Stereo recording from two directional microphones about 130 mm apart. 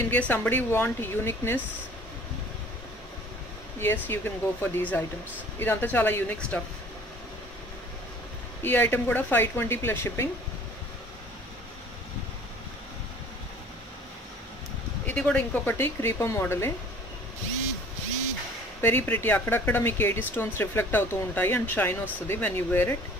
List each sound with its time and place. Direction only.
0.1 s speech: 15° left (ahead or behind)
4.1 s speech: 15° left (ahead or behind)
8.6 s speech: 15° left (ahead or behind)
15.0 s speech: 10° left (ahead or behind)
18.8 s speech: 15° left (ahead or behind)